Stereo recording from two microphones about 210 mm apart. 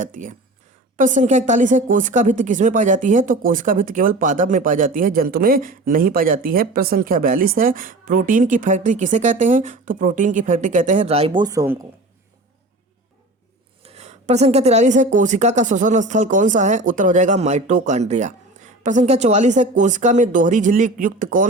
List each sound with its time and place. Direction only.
0.0 s speech: 40° right (ahead or behind)
11.4 s speech: 15° right (ahead or behind)
13.8 s speech: 30° right (ahead or behind)